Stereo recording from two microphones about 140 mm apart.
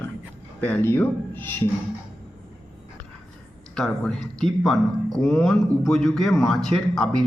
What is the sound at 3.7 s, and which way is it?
Speech, 5° left (ahead or behind).